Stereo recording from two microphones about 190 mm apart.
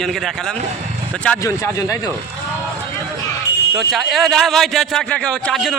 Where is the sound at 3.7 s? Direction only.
Centre (ahead or behind).